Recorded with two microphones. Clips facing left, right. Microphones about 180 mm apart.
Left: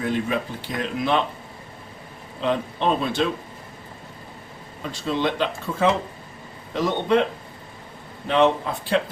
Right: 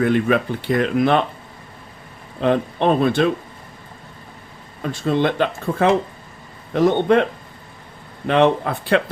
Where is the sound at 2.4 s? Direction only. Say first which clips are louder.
Right 5 dB; 60° right (ahead or behind).